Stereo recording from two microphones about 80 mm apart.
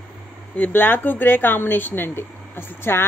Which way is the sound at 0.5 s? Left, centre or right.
Left.